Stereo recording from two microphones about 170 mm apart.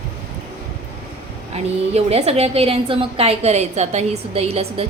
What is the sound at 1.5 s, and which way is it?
A woman's voice, 35° right (ahead or behind).